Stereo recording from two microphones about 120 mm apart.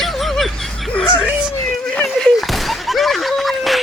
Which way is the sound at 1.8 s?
10° left (ahead or behind).